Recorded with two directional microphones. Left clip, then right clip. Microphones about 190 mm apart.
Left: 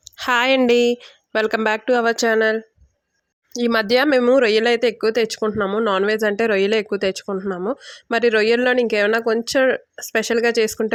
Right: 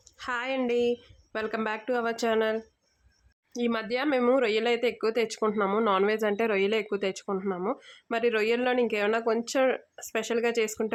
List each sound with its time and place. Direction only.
0.2 s a woman's voice: 45° left (ahead or behind); by 2.6 s 30° left (ahead or behind)
3.7 s a woman's voice: 45° left (ahead or behind)
4.2 s speech: 25° left (ahead or behind)